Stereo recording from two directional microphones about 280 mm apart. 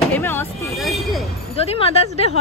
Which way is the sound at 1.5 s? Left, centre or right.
Left.